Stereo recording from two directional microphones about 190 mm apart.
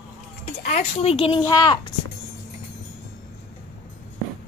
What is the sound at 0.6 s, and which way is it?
Speech, 35° left (ahead or behind).